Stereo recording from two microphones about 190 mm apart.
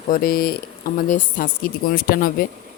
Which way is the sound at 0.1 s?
50° left (ahead or behind).